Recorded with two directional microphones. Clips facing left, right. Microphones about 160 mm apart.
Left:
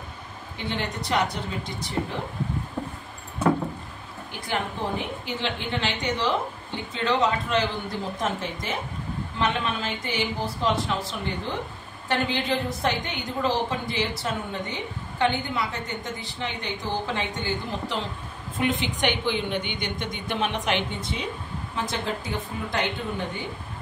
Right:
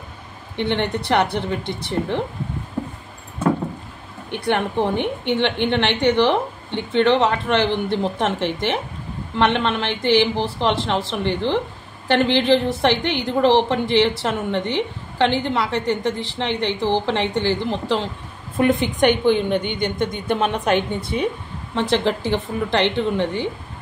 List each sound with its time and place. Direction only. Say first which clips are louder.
0.6 s a woman's voice: right 9 dB; 65° right (ahead or behind)
2.8 s a sound: right 7 dB; 10° right (ahead or behind)
4.3 s a woman's voice: right 8 dB; 70° right (ahead or behind)
18.6 s a woman's voice: right 8 dB; 50° right (ahead or behind)
21.7 s speech: right 10 dB; 80° right